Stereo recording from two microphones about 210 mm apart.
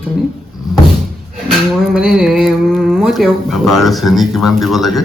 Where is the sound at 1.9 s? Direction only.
Centre (ahead or behind).